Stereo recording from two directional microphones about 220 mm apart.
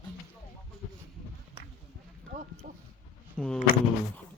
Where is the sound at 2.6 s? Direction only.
35° right (ahead or behind).